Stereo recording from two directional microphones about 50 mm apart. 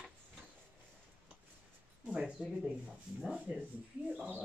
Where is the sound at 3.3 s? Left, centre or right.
Centre.